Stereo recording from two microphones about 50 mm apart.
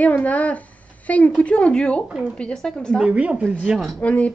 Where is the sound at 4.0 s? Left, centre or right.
Left.